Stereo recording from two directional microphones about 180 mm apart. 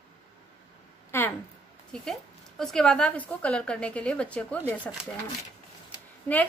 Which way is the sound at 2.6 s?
5° left (ahead or behind).